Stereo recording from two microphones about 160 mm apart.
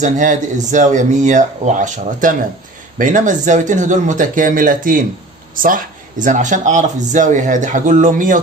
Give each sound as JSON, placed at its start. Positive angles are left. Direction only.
{"t": 0.0, "sound": "speech", "side_deg": -50}